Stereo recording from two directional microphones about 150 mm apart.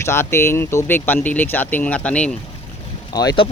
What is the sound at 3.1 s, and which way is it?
Speech, 25° left (ahead or behind).